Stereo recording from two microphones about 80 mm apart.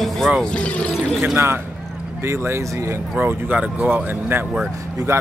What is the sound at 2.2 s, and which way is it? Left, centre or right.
Speech, right.